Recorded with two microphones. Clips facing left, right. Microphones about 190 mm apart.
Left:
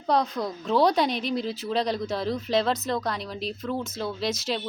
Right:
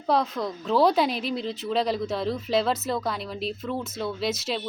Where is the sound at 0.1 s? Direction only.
Centre (ahead or behind).